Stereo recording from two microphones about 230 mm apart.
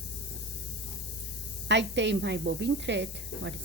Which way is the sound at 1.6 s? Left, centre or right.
Right.